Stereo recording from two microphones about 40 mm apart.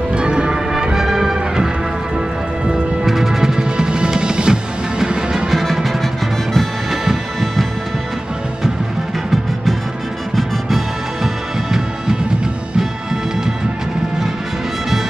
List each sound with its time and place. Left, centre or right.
0.1 s music: right
5.5 s music: centre
11.2 s music: centre